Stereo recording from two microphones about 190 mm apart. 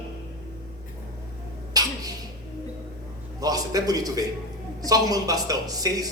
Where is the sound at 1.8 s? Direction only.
20° right (ahead or behind).